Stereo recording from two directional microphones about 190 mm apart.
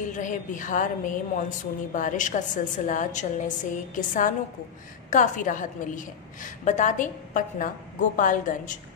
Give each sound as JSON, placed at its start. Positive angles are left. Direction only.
{"t": 0.1, "sound": "a woman's voice", "side_deg": 40}